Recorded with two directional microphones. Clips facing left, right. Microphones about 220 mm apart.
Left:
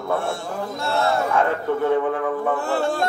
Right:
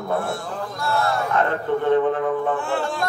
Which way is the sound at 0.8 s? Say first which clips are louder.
Left 1 dB; 25° left (ahead or behind).